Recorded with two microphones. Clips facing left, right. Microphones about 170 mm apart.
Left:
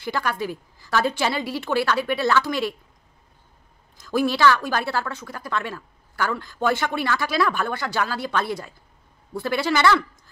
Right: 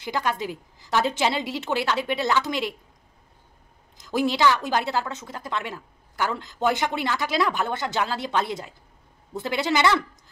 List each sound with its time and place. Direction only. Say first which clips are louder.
0.0 s a woman's voice: left 1 dB; 20° right (ahead or behind)
4.0 s a woman's voice: left 2 dB; 20° right (ahead or behind)